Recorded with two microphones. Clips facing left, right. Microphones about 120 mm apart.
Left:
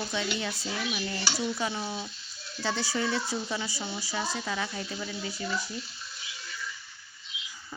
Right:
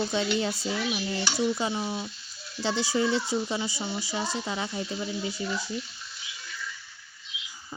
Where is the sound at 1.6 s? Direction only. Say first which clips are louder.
Right 3 dB; 20° right (ahead or behind).